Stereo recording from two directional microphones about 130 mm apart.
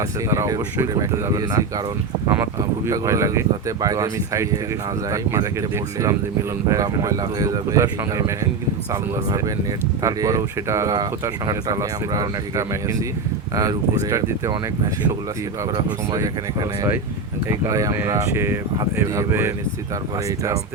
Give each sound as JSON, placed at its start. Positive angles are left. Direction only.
{"t": 0.3, "sound": "speech", "side_deg": -25}
{"t": 6.7, "sound": "speech", "side_deg": -25}
{"t": 10.0, "sound": "speech", "side_deg": -25}
{"t": 16.1, "sound": "speech", "side_deg": -25}